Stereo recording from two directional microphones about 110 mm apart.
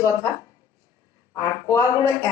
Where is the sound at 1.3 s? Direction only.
30° left (ahead or behind).